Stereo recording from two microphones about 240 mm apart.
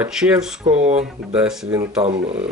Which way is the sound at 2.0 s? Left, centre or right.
Right.